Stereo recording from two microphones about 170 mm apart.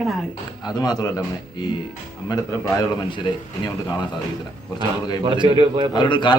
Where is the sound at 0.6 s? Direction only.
25° left (ahead or behind).